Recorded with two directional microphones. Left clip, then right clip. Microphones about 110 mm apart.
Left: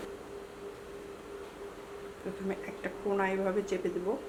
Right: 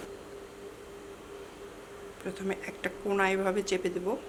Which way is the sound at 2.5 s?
55° right (ahead or behind).